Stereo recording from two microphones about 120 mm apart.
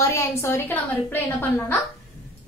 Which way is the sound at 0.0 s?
20° left (ahead or behind).